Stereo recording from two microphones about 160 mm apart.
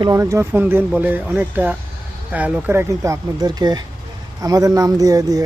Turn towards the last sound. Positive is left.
turn(degrees=-25)  # may be behind; listen again after turning